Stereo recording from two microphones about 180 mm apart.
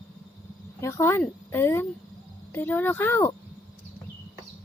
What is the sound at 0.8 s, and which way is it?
A woman's voice, 15° left (ahead or behind).